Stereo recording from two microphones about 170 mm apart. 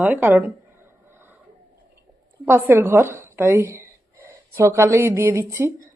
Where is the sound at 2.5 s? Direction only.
15° right (ahead or behind).